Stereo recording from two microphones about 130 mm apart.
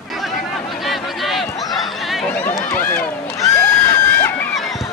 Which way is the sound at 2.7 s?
15° left (ahead or behind).